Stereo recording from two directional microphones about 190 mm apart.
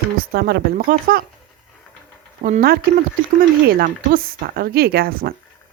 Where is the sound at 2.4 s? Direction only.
50° right (ahead or behind).